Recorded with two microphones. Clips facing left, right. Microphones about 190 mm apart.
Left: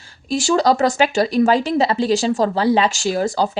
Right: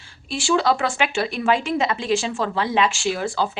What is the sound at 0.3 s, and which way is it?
A woman's voice, 40° left (ahead or behind).